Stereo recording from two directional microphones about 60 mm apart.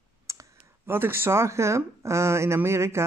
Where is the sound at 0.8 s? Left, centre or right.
Right.